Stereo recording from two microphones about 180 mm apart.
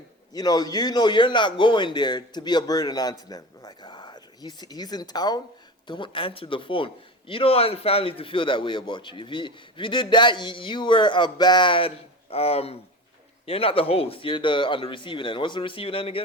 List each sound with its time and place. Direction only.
0.3 s a man's voice: 20° left (ahead or behind)